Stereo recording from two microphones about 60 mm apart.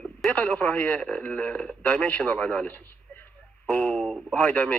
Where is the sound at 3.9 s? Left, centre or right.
Centre.